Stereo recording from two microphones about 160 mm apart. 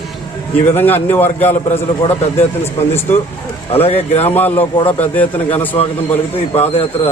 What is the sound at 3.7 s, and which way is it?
Speech, 40° left (ahead or behind).